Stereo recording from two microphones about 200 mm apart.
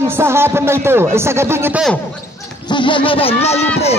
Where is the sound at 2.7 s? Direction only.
25° left (ahead or behind).